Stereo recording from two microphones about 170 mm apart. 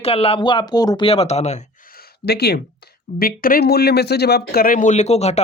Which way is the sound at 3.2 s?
60° left (ahead or behind).